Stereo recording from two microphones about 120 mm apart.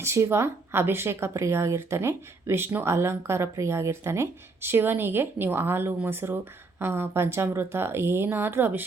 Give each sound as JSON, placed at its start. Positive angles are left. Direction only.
{"t": 0.0, "sound": "speech", "side_deg": -20}